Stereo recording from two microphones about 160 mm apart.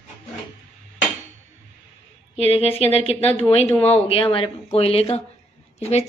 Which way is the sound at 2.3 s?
40° left (ahead or behind).